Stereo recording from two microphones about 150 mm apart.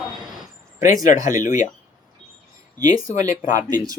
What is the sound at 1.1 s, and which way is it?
Speech, 60° left (ahead or behind).